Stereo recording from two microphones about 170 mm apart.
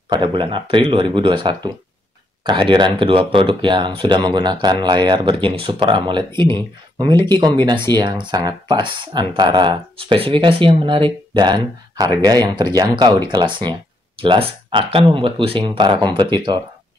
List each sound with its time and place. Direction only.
0.1 s speech: 30° right (ahead or behind)